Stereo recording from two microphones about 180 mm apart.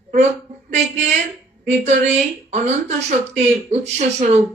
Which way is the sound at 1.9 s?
40° right (ahead or behind).